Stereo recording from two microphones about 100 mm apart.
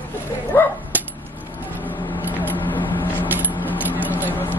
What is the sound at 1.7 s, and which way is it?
Vehicle, 20° left (ahead or behind).